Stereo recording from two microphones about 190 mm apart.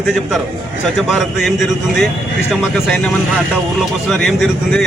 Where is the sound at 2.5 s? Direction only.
Centre (ahead or behind).